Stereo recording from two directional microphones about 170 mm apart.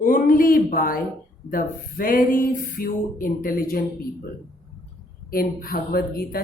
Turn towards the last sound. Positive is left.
turn(degrees=60)  # may be behind; listen again after turning